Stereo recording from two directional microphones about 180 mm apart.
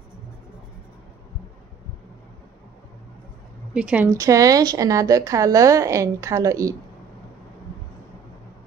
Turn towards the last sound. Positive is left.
turn(degrees=-20)  # may be behind; listen again after turning